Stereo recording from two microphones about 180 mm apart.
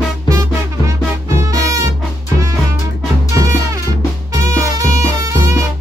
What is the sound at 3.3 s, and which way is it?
Music, 20° right (ahead or behind).